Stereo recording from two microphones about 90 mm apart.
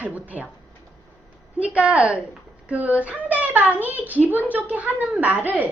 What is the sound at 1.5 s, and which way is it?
A child's voice, 15° right (ahead or behind).